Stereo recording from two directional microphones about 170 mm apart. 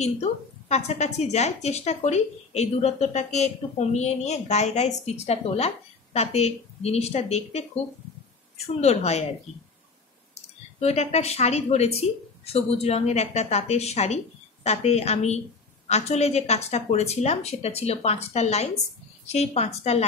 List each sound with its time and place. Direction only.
0.0 s a woman's voice: 40° left (ahead or behind)
10.8 s a woman's voice: 40° left (ahead or behind)